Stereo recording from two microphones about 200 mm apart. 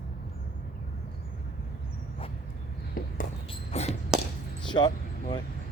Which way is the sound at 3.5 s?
30° left (ahead or behind).